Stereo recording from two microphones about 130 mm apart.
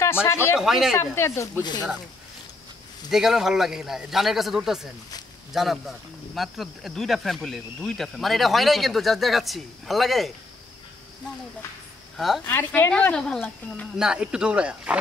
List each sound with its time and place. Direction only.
0.0 s speech: 20° left (ahead or behind)
0.6 s speech: 5° right (ahead or behind)
1.1 s speech: 20° left (ahead or behind)
1.6 s speech: 35° left (ahead or behind)
3.1 s speech: 5° right (ahead or behind)
12.4 s speech: 15° left (ahead or behind)
13.9 s speech: 5° right (ahead or behind)